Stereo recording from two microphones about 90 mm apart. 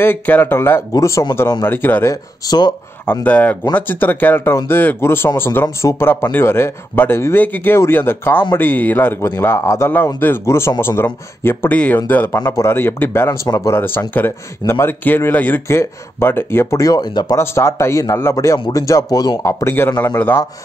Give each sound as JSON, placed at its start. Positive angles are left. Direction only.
{"t": 0.0, "sound": "a man's voice", "side_deg": 25}
{"t": 1.6, "sound": "a man's voice", "side_deg": 20}
{"t": 2.4, "sound": "speech", "side_deg": 45}
{"t": 3.3, "sound": "a man's voice", "side_deg": 15}
{"t": 16.8, "sound": "speech", "side_deg": 45}
{"t": 17.4, "sound": "a man's voice", "side_deg": 30}
{"t": 19.4, "sound": "a man's voice", "side_deg": 30}